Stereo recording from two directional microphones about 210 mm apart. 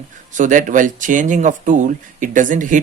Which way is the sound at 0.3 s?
35° right (ahead or behind).